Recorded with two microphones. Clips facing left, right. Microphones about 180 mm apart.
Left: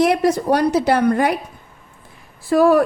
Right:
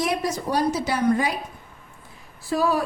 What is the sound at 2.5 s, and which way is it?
Speech, 55° left (ahead or behind).